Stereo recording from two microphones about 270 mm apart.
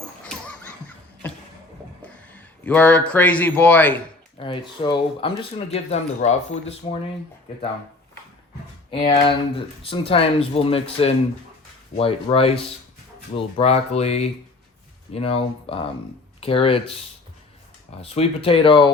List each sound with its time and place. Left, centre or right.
0.3 s a sound: centre
2.0 s speech: centre
4.4 s speech: centre
8.9 s speech: centre
18.0 s speech: left